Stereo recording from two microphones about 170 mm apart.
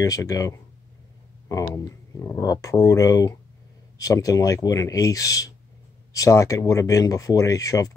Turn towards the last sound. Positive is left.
turn(degrees=20)  # may be behind; listen again after turning